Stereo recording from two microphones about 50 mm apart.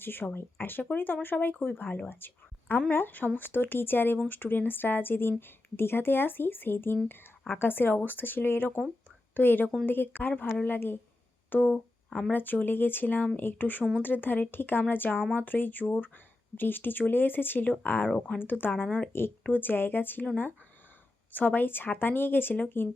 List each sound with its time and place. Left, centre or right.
0.0 s a woman's voice: left
19.1 s speech: left
19.5 s speech: left
21.3 s speech: left